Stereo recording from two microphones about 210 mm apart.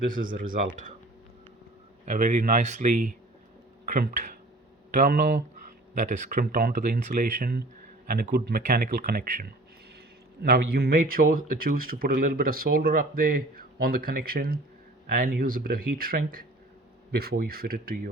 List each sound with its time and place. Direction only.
0.1 s speech: 40° right (ahead or behind)
2.0 s speech: 40° right (ahead or behind)